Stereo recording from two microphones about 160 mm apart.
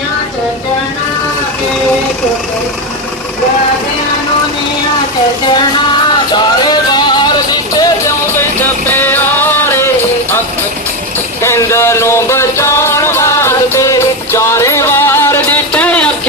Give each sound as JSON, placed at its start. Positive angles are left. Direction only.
{"t": 6.3, "sound": "music", "side_deg": 25}
{"t": 8.9, "sound": "music", "side_deg": 10}
{"t": 11.4, "sound": "music", "side_deg": 15}